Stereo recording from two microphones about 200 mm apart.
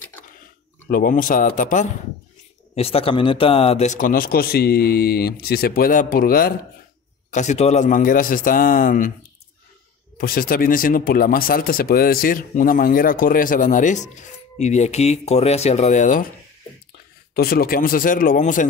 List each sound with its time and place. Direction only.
0.8 s speech: 45° left (ahead or behind)
2.7 s speech: 30° left (ahead or behind)
10.1 s speech: 45° left (ahead or behind)
17.3 s speech: 50° left (ahead or behind)